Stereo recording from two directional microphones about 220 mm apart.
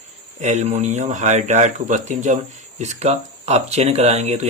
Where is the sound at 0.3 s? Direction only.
30° right (ahead or behind).